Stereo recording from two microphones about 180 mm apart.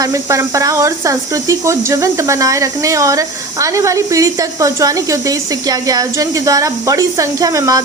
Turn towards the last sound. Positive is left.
turn(degrees=-20)  # may be behind; listen again after turning